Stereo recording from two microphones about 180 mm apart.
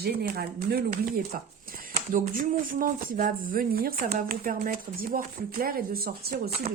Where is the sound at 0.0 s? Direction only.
60° right (ahead or behind).